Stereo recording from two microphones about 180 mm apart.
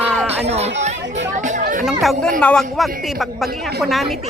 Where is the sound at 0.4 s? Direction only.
35° right (ahead or behind).